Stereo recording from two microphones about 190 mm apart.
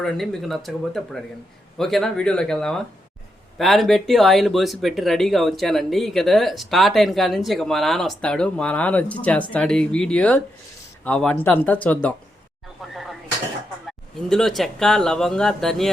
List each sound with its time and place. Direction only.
0.0 s speech: centre (ahead or behind)
12.9 s vehicle: centre (ahead or behind)
13.8 s speech: centre (ahead or behind)